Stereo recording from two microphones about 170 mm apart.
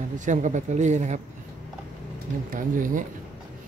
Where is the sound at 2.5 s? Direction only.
50° right (ahead or behind).